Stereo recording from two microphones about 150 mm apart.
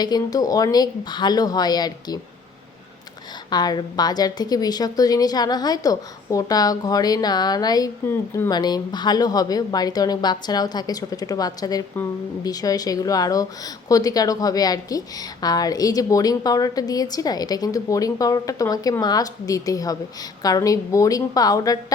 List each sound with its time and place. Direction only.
0.0 s a woman's voice: 25° left (ahead or behind)
3.5 s a woman's voice: 25° left (ahead or behind)